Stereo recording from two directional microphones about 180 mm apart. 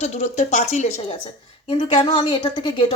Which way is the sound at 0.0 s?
40° left (ahead or behind).